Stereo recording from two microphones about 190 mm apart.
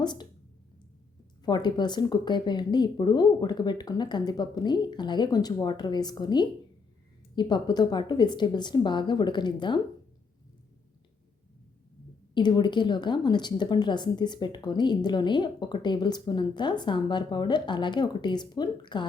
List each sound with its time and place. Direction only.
0.0 s speech: 25° left (ahead or behind)
1.5 s speech: 25° left (ahead or behind)
12.3 s speech: 25° left (ahead or behind)